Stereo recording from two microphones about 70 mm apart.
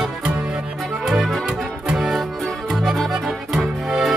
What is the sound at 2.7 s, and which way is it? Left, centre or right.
Accordion, centre.